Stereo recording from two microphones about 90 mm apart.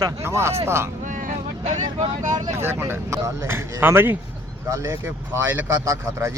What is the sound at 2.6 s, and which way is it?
Speech, 25° right (ahead or behind).